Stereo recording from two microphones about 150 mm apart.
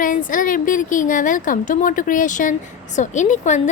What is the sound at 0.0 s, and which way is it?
A woman's voice, 65° left (ahead or behind).